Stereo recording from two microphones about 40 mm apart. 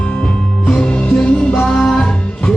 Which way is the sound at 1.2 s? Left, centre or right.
Left.